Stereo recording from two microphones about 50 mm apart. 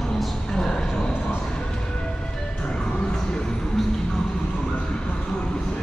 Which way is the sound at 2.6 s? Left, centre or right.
Centre.